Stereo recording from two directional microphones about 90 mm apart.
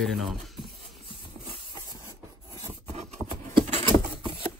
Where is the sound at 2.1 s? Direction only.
35° right (ahead or behind).